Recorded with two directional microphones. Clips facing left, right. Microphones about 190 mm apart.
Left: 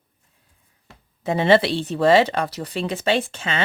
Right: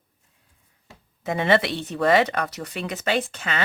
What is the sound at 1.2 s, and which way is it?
Speech, 30° left (ahead or behind).